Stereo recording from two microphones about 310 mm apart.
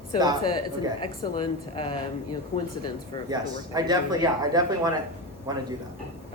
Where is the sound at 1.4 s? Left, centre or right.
Centre.